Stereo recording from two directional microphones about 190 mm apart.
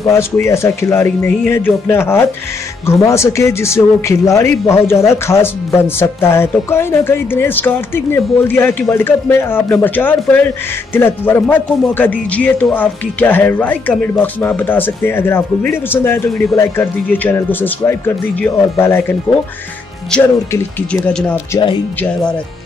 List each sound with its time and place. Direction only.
0.1 s speech: 15° left (ahead or behind)